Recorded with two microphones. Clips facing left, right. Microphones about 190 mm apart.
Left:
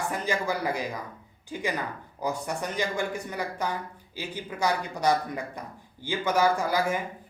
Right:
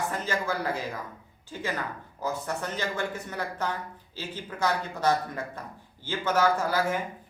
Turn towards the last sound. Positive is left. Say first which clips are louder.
# left 1 dB
turn(degrees=15)  # may be behind; listen again after turning